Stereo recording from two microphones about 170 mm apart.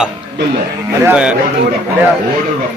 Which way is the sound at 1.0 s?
5° right (ahead or behind).